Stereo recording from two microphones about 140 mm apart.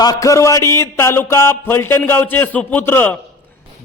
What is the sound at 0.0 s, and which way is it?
Speech, 25° left (ahead or behind).